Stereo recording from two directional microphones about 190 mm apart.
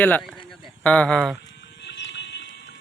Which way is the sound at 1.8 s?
70° left (ahead or behind).